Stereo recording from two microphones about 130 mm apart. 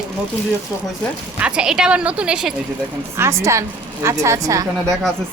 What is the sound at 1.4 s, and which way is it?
A woman's voice, 10° right (ahead or behind).